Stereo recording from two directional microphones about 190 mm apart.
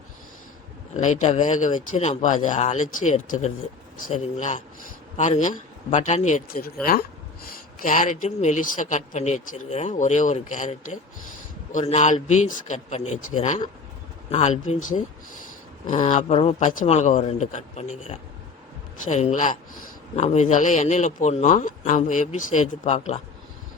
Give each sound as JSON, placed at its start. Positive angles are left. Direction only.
{"t": 0.9, "sound": "speech", "side_deg": 40}
{"t": 7.8, "sound": "speech", "side_deg": 40}